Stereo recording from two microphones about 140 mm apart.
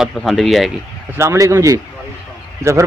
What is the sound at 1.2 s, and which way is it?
Speech, 20° right (ahead or behind).